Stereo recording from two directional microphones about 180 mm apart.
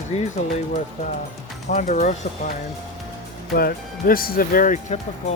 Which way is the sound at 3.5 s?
55° left (ahead or behind).